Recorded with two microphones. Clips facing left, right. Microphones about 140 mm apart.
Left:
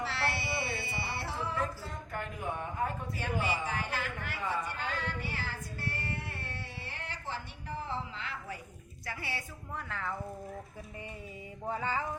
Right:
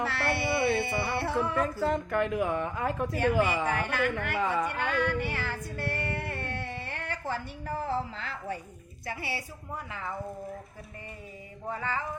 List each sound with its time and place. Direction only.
0.0 s music: 55° right (ahead or behind); by 8.5 s 35° right (ahead or behind)
9.0 s a woman's voice: 15° right (ahead or behind)
9.9 s speech: centre (ahead or behind)
11.7 s music: 20° left (ahead or behind)